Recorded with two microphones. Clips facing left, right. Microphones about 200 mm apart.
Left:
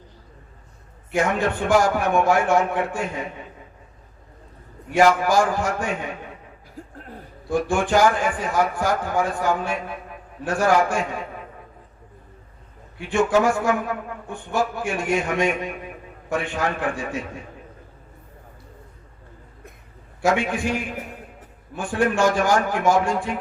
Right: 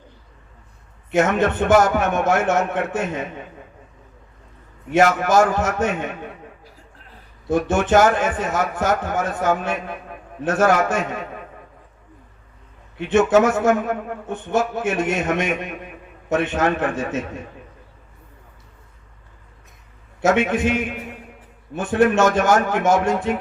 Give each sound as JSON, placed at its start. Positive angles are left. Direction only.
{"t": 1.1, "sound": "a man's voice", "side_deg": -20}
{"t": 5.2, "sound": "a man's voice", "side_deg": -20}
{"t": 6.9, "sound": "a sound", "side_deg": 45}
{"t": 7.4, "sound": "a man's voice", "side_deg": -20}
{"t": 13.0, "sound": "a man's voice", "side_deg": -20}
{"t": 20.2, "sound": "a man's voice", "side_deg": -20}